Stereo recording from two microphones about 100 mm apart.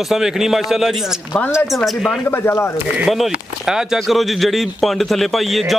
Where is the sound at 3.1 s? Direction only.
5° right (ahead or behind).